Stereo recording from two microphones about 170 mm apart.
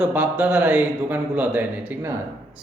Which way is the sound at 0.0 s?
10° right (ahead or behind).